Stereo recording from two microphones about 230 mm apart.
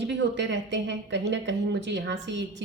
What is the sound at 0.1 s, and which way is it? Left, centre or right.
Speech, right.